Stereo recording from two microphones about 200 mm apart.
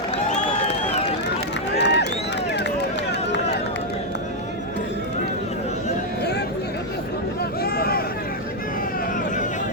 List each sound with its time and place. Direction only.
1.8 s run: 60° left (ahead or behind)
7.6 s vehicle: 50° left (ahead or behind)
9.1 s a sound: 40° left (ahead or behind)